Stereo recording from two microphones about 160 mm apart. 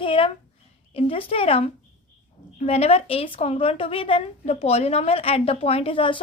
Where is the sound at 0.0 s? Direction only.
35° left (ahead or behind).